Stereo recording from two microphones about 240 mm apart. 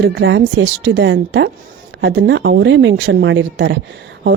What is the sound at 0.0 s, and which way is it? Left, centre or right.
Speech, right.